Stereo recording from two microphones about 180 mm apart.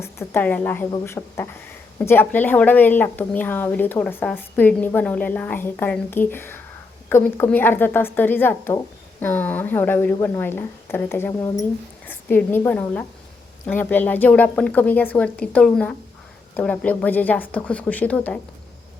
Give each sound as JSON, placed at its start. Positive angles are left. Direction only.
{"t": 0.0, "sound": "a woman's voice", "side_deg": 15}